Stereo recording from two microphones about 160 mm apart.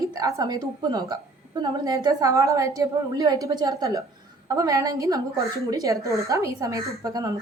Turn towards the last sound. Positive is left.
turn(degrees=-20)  # may be behind; listen again after turning